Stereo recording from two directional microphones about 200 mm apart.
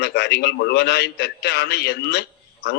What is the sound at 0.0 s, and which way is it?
Speech, 55° left (ahead or behind).